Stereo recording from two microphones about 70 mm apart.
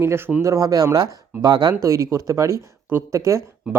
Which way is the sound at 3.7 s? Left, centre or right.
Centre.